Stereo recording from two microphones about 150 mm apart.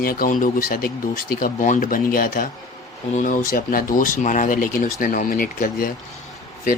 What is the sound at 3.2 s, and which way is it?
Speech, 60° left (ahead or behind).